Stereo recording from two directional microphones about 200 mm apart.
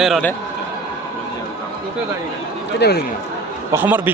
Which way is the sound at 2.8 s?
55° left (ahead or behind).